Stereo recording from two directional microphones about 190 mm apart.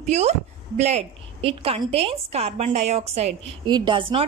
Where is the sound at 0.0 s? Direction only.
35° right (ahead or behind).